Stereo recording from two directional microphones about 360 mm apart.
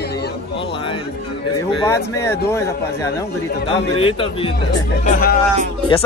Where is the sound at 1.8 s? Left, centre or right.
Centre.